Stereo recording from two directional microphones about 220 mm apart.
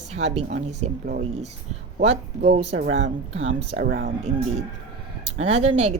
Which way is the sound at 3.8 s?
45° right (ahead or behind).